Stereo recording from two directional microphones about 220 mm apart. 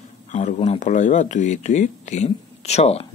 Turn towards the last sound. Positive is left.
turn(degrees=30)  # may be behind; listen again after turning